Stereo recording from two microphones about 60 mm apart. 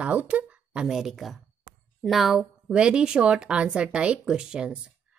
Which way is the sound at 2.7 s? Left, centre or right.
Centre.